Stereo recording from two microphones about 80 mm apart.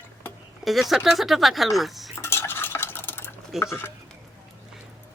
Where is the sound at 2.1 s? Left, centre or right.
Left.